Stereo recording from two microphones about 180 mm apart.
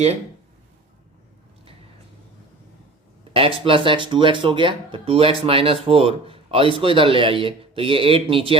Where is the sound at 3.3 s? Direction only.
30° right (ahead or behind).